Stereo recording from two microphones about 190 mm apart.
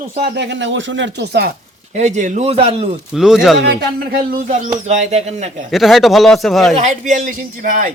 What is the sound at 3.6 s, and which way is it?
Speech, 60° right (ahead or behind).